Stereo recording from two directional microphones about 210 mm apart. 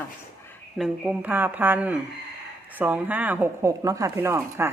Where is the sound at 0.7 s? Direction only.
5° right (ahead or behind).